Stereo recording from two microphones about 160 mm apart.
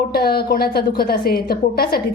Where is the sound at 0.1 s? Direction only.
75° left (ahead or behind).